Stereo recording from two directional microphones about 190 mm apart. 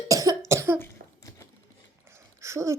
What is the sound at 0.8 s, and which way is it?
Cough, 15° left (ahead or behind).